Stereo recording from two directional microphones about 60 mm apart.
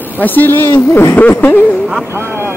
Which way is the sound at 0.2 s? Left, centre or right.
Left.